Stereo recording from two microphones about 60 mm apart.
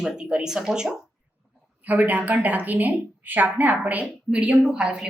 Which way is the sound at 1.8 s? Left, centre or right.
Right.